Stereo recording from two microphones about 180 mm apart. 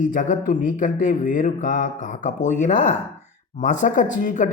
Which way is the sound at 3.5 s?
45° left (ahead or behind).